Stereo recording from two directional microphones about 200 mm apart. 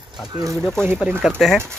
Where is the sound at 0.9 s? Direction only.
5° right (ahead or behind).